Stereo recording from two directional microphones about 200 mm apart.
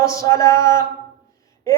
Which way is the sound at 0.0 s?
15° left (ahead or behind).